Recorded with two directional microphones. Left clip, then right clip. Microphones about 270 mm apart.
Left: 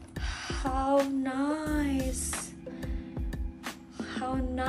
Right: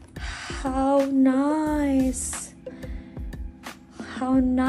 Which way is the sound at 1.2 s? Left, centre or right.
Right.